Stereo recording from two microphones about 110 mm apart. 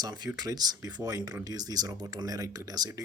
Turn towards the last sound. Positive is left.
turn(degrees=-35)  # may be behind; listen again after turning